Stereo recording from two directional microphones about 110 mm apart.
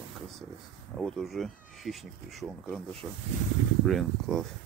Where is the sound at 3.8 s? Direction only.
Centre (ahead or behind).